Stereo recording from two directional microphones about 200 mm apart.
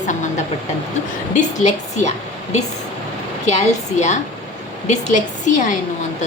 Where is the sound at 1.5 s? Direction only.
35° left (ahead or behind).